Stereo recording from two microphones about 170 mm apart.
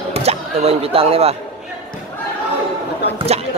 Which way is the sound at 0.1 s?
40° right (ahead or behind).